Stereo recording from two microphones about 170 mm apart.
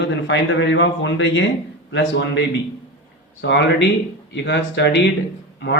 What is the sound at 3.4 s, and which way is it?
A man's voice, 90° left.